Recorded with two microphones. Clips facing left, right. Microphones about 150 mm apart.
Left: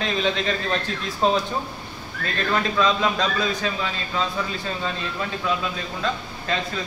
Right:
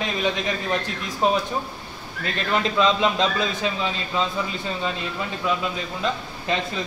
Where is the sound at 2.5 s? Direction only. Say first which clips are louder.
Right 2 dB; 20° right (ahead or behind).